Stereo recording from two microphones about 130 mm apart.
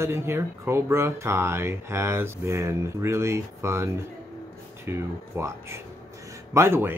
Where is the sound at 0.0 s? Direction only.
20° right (ahead or behind).